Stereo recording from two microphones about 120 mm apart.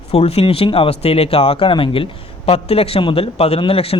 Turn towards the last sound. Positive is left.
turn(degrees=55)  # may be behind; listen again after turning